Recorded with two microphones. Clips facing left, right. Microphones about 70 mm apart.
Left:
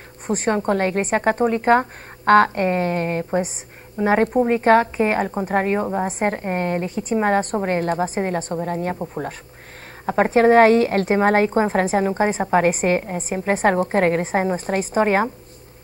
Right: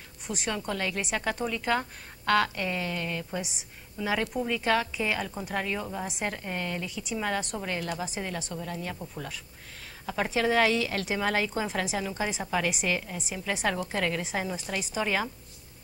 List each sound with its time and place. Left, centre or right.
0.3 s speech: left